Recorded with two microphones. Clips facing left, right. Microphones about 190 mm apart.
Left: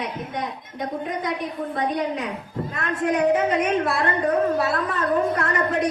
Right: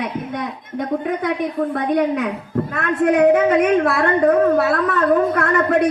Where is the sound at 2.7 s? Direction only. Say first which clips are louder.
Right 6 dB; 65° right (ahead or behind).